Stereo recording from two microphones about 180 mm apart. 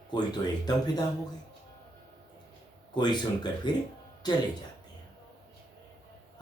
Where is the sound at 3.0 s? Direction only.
25° left (ahead or behind).